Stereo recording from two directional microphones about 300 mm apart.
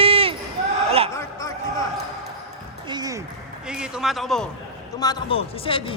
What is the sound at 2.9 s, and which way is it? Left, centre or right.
Music, centre.